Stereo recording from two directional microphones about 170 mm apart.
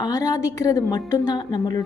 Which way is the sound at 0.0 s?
20° left (ahead or behind).